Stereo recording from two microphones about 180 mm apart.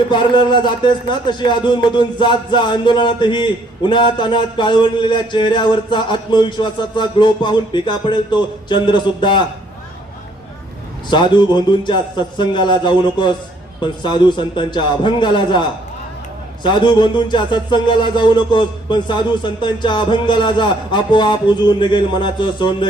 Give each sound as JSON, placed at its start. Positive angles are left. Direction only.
{"t": 0.1, "sound": "music", "side_deg": 25}
{"t": 11.1, "sound": "music", "side_deg": 25}
{"t": 16.6, "sound": "music", "side_deg": 25}